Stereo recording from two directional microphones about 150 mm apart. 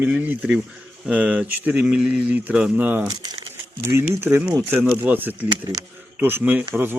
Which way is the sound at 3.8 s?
15° right (ahead or behind).